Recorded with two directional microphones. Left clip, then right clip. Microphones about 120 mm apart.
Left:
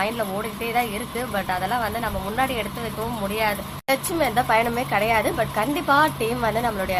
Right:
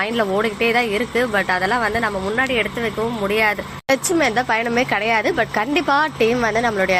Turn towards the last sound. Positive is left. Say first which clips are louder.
# right 5 dB
turn(degrees=-25)  # may be behind; listen again after turning